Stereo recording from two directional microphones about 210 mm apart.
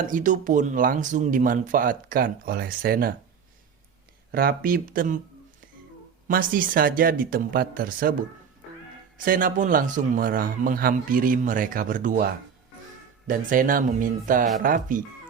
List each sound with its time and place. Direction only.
0.0 s a man's voice: 40° right (ahead or behind)
4.3 s speech: 45° right (ahead or behind)
6.2 s speech: 40° right (ahead or behind)
9.1 s a man's voice: 40° right (ahead or behind)